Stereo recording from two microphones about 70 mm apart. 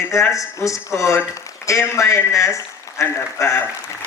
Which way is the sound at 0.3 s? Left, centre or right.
Left.